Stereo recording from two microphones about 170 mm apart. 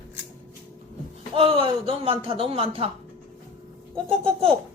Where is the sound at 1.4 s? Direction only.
35° right (ahead or behind).